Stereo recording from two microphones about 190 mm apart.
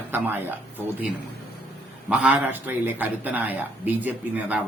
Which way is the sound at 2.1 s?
5° right (ahead or behind).